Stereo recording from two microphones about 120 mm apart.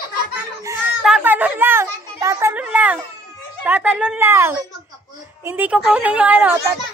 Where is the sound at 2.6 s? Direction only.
10° right (ahead or behind).